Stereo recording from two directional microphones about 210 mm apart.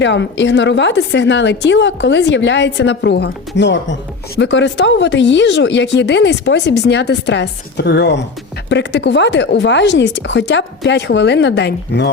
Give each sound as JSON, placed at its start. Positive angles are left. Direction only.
{"t": 0.0, "sound": "a woman's voice", "side_deg": 60}